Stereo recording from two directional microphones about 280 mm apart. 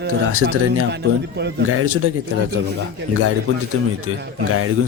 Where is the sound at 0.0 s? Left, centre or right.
Right.